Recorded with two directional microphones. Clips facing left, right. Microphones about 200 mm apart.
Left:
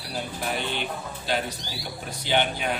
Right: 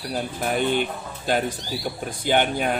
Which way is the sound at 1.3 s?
50° right (ahead or behind).